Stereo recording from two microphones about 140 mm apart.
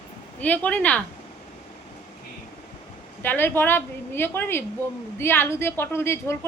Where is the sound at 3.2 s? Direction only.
15° left (ahead or behind).